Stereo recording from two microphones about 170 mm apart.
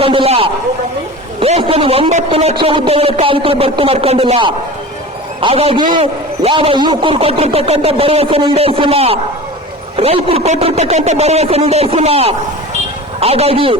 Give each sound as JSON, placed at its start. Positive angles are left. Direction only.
{"t": 0.0, "sound": "a man's voice", "side_deg": -30}